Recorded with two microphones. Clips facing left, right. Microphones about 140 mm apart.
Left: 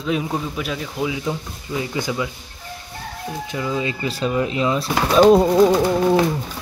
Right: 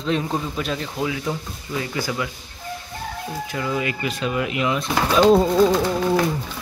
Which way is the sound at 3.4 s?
20° left (ahead or behind).